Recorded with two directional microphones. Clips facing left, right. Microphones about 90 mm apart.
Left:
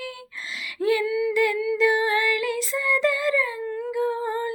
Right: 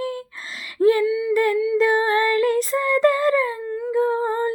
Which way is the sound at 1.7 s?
40° right (ahead or behind).